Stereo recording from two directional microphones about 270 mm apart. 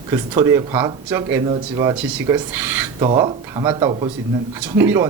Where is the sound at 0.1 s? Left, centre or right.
Centre.